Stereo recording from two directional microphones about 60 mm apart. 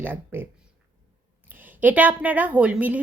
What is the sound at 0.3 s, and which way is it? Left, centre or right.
Speech, right.